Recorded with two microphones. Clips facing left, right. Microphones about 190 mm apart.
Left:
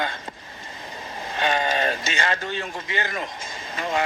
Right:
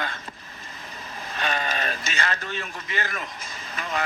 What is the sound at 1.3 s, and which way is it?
Speech, 20° left (ahead or behind).